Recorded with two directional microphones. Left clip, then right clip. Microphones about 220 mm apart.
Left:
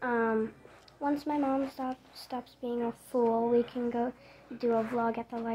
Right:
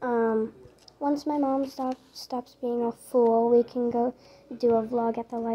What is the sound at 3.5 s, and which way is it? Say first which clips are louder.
Speech: right 6 dB; 20° right (ahead or behind).